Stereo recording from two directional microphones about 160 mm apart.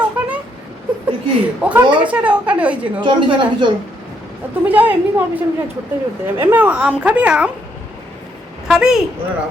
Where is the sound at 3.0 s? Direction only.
30° right (ahead or behind).